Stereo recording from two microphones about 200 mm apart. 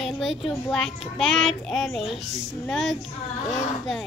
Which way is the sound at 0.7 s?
Centre (ahead or behind).